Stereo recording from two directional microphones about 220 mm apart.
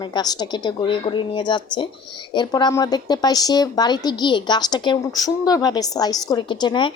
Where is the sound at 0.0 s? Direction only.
20° left (ahead or behind).